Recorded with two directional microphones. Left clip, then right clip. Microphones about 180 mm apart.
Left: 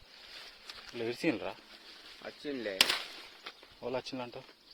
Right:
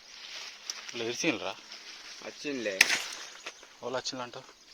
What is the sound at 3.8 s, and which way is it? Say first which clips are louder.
Speech: right 3 dB; 35° left (ahead or behind).